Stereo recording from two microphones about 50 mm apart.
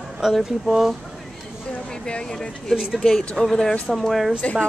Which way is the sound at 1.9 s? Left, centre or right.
Centre.